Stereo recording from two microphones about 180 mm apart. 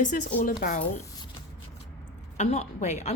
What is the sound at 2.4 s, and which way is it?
Speech, 40° left (ahead or behind).